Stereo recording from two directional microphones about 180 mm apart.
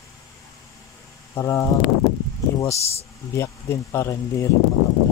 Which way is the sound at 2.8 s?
35° left (ahead or behind).